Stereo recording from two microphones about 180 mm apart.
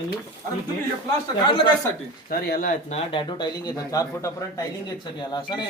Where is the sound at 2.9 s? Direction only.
30° left (ahead or behind).